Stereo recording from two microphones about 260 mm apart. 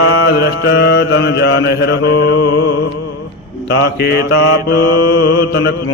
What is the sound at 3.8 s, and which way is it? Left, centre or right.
Mantra, left.